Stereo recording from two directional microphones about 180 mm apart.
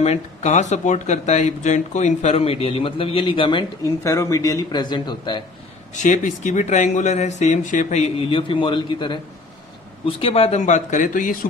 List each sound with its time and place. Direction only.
0.0 s speech: 40° left (ahead or behind)
5.9 s speech: 45° left (ahead or behind)